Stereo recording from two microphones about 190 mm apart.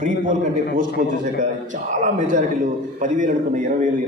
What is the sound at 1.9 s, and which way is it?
A man's voice, 40° right (ahead or behind).